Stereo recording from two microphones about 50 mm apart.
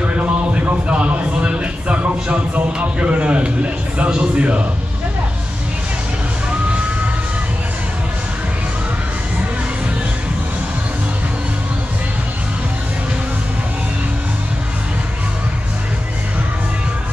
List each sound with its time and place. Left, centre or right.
0.0 s speech: right